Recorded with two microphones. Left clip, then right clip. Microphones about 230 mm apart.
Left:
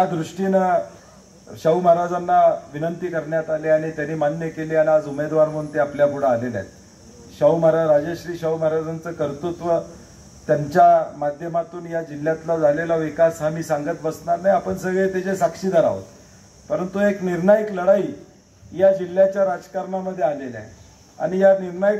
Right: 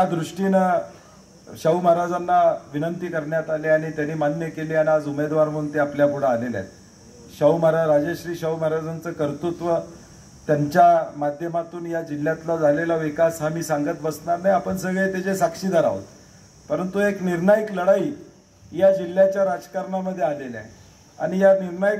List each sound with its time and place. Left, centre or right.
0.0 s a man's voice: right